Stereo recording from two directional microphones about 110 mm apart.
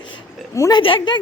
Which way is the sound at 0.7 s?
50° left (ahead or behind).